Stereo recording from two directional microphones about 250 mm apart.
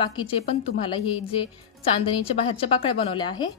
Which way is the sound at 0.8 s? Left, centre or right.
Left.